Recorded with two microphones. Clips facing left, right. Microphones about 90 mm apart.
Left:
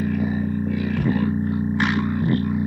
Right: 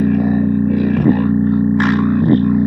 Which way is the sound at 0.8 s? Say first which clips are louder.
Right 8 dB; 40° right (ahead or behind).